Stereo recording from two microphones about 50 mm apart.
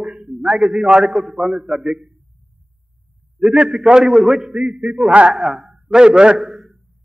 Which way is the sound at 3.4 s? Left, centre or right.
Centre.